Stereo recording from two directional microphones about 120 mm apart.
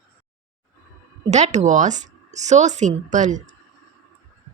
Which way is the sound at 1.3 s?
75° right (ahead or behind).